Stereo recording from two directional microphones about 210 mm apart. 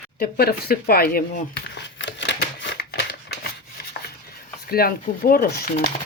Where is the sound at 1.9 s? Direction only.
60° left (ahead or behind).